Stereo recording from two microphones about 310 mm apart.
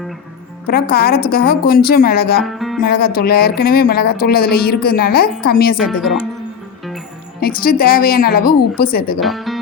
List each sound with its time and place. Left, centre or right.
0.7 s speech: left
2.4 s speech: centre
2.8 s speech: left
5.7 s speech: centre
7.4 s speech: left
9.2 s speech: centre